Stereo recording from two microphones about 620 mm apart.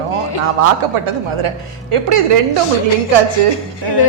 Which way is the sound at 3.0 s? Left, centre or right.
Right.